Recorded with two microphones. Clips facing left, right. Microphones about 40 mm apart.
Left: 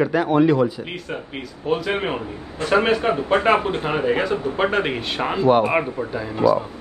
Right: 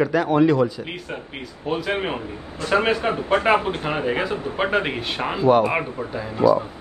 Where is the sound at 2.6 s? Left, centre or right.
Left.